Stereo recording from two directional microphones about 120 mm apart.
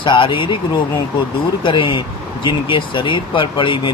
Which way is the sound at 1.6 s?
45° left (ahead or behind).